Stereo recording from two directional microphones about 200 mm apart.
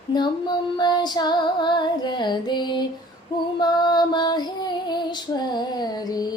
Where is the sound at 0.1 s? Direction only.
20° left (ahead or behind).